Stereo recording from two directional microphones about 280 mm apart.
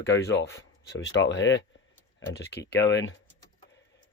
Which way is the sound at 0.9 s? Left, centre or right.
Left.